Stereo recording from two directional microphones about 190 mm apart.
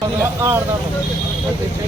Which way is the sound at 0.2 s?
10° right (ahead or behind).